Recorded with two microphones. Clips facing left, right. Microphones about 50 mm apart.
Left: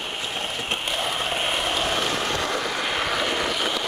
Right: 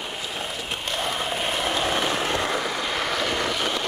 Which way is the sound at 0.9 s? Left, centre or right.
Centre.